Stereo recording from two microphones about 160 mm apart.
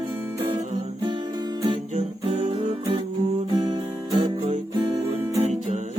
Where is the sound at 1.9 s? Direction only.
40° right (ahead or behind).